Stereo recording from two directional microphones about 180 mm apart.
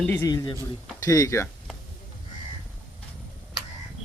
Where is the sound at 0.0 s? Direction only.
15° left (ahead or behind).